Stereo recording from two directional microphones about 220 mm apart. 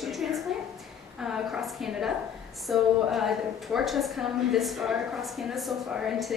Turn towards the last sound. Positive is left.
turn(degrees=0)  # may be behind; listen again after turning